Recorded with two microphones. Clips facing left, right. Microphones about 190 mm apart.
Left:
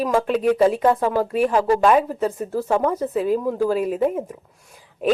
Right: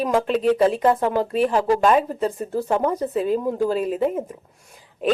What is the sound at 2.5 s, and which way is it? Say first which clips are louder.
Speech: left 1 dB; 15° right (ahead or behind).